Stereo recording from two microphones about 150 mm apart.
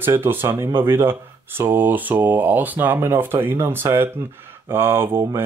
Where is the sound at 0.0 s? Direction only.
15° right (ahead or behind).